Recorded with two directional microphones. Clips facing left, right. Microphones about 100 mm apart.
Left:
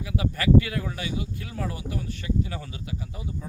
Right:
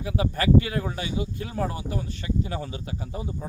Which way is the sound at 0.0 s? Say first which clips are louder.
Right 2 dB; 30° right (ahead or behind).